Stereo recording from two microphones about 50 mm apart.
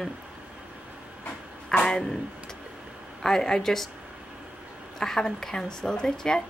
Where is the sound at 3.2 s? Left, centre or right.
Centre.